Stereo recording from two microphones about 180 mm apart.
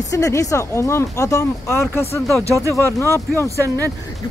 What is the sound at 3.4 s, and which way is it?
Speech, 15° right (ahead or behind).